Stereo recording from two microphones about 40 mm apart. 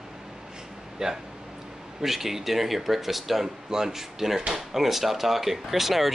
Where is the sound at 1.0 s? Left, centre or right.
Centre.